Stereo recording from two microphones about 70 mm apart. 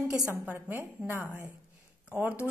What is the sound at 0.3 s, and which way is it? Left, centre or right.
A woman's voice, right.